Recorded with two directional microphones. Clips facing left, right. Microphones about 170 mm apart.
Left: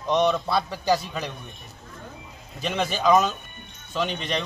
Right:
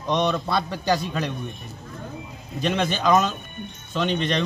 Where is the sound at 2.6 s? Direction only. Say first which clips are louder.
Right 1 dB; 5° left (ahead or behind).